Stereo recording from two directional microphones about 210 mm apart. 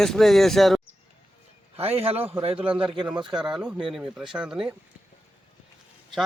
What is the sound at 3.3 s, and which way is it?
Speech, 5° right (ahead or behind).